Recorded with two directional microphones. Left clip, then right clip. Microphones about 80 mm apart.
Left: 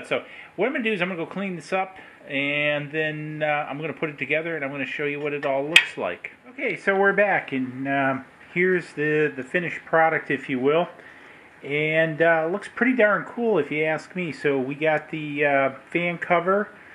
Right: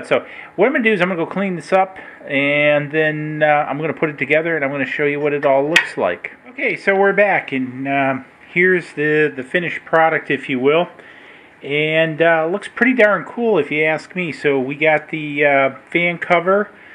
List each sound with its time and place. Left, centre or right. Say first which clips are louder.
0.0 s speech: right 9 dB; right